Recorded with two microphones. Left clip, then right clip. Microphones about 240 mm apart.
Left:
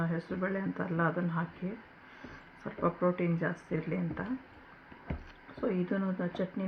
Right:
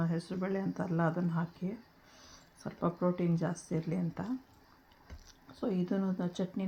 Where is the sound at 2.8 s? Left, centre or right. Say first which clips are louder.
Left 3 dB; right.